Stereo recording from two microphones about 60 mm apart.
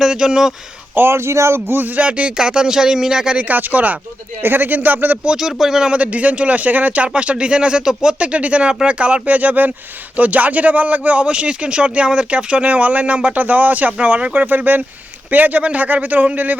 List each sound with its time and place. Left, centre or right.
0.0 s speech: centre
0.9 s a man's voice: right; by 3.3 s centre
3.3 s a man's voice: right
5.2 s a man's voice: centre; by 16.6 s right